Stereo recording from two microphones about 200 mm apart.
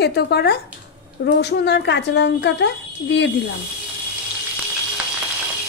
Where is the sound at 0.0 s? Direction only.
55° left (ahead or behind).